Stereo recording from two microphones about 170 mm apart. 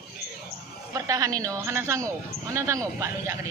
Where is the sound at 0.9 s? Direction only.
20° right (ahead or behind).